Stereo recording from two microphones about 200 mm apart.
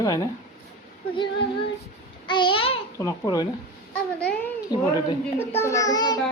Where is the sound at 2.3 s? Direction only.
25° left (ahead or behind).